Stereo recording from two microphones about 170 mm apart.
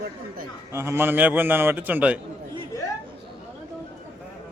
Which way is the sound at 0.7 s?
15° right (ahead or behind).